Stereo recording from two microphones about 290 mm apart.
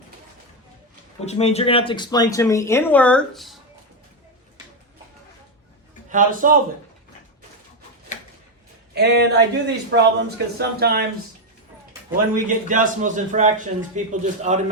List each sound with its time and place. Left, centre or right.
1.2 s speech: left; by 3.6 s centre
6.1 s a man's voice: right
9.0 s speech: right
12.3 s a man's voice: right